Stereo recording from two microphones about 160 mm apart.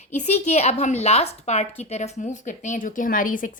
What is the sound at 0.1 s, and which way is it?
A woman's voice, 45° left (ahead or behind).